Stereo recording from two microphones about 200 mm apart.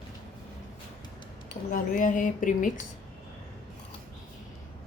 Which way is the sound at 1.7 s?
45° left (ahead or behind).